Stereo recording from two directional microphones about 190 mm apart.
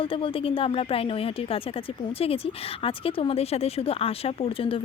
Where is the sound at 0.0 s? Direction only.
30° left (ahead or behind).